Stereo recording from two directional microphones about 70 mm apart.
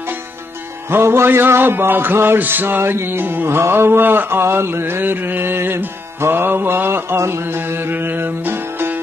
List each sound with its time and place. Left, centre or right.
0.8 s music: right